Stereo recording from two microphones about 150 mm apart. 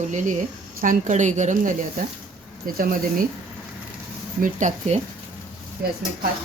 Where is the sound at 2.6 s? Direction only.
70° right (ahead or behind).